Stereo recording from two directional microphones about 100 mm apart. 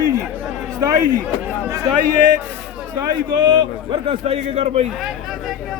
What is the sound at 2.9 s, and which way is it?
A man's voice, 50° right (ahead or behind).